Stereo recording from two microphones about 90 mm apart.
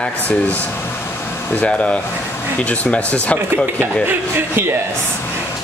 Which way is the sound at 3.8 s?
25° right (ahead or behind).